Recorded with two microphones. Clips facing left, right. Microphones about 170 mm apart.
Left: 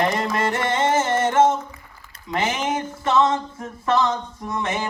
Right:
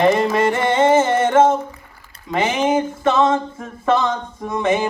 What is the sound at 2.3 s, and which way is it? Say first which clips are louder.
Speech: right 6 dB; 25° right (ahead or behind).